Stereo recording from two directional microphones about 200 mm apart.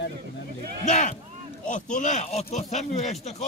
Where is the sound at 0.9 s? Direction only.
35° left (ahead or behind).